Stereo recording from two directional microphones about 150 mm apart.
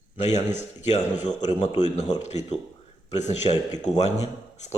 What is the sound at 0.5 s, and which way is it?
A man's voice, 50° left (ahead or behind).